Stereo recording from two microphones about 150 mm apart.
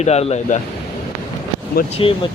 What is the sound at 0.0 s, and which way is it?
Speech, 45° left (ahead or behind).